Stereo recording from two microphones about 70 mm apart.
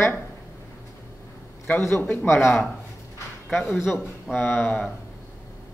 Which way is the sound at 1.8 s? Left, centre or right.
Left.